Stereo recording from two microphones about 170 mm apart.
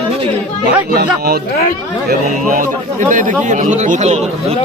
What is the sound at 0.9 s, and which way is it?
Speech, 65° right (ahead or behind).